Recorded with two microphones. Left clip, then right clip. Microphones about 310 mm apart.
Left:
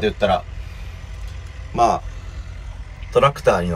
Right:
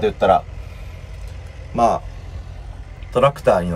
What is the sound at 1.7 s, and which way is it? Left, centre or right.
Speech, centre.